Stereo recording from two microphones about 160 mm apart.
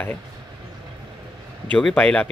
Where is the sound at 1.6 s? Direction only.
5° left (ahead or behind).